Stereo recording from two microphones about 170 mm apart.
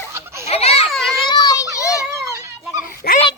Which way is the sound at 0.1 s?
15° right (ahead or behind).